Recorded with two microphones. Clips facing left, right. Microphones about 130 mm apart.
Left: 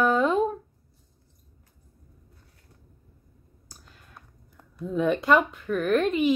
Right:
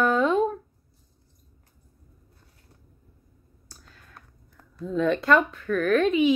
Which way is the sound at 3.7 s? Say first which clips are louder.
Even; 15° left (ahead or behind).